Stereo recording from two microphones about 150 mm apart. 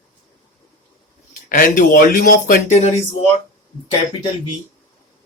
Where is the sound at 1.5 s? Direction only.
70° left (ahead or behind); by 2.9 s 50° left (ahead or behind).